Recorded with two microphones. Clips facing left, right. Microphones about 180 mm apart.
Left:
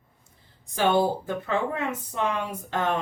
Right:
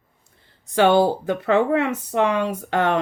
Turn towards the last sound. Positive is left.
turn(degrees=-75)  # may be behind; listen again after turning